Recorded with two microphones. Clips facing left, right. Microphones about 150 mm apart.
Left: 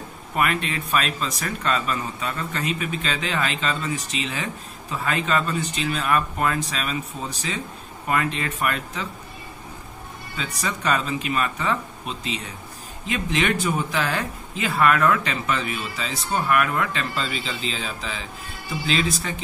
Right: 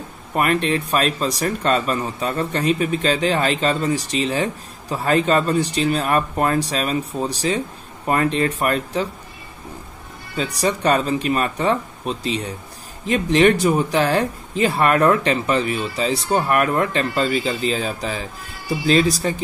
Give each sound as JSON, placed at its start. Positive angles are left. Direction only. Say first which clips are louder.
{"t": 0.4, "sound": "speech", "louder": "right 5 dB", "side_deg": -40}
{"t": 10.3, "sound": "speech", "louder": "right 8 dB", "side_deg": -35}